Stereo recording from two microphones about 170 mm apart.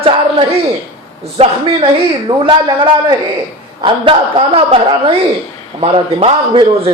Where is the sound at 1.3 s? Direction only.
35° right (ahead or behind).